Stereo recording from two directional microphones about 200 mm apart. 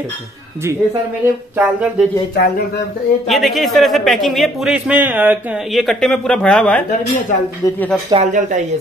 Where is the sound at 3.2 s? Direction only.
Centre (ahead or behind).